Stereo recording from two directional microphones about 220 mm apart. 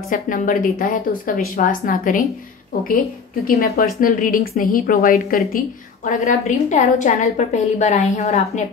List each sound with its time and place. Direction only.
0.1 s a woman's voice: 35° left (ahead or behind)